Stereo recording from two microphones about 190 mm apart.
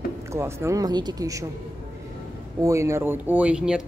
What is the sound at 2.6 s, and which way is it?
Speech, 15° right (ahead or behind).